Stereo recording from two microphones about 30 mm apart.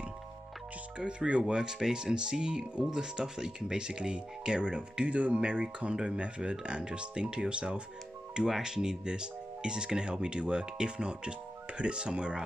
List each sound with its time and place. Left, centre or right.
0.9 s speech: right
1.5 s speech: right
5.1 s speech: right
5.4 s speech: right
8.5 s speech: centre